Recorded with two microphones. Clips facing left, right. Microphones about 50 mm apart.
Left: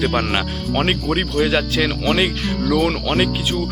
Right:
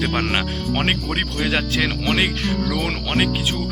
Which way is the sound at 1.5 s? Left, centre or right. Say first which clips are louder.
Left 2 dB; right.